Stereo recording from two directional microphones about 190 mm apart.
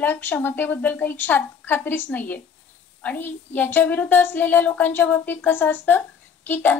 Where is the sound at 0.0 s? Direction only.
10° left (ahead or behind).